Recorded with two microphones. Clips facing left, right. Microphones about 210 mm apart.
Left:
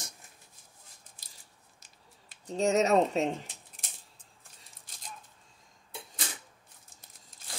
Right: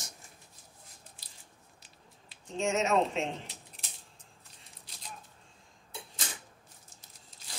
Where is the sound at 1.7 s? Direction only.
45° left (ahead or behind).